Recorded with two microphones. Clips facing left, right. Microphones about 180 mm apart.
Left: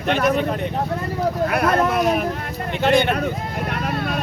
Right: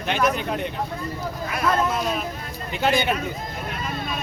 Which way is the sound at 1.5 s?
60° left (ahead or behind).